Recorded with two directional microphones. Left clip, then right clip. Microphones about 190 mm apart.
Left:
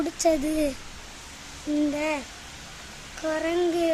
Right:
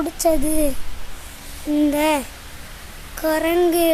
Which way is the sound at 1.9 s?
25° right (ahead or behind).